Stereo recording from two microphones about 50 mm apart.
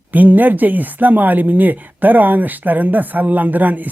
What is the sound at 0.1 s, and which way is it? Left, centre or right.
Speech, right.